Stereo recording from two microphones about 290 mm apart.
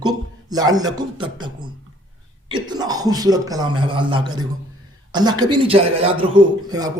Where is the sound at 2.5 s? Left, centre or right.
Centre.